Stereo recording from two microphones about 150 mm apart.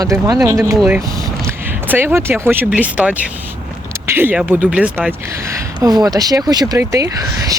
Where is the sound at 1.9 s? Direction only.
15° right (ahead or behind).